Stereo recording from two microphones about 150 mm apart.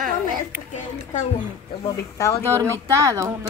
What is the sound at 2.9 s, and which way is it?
Speech, 20° right (ahead or behind).